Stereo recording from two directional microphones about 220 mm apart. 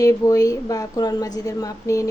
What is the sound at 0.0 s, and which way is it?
Speech, 15° left (ahead or behind).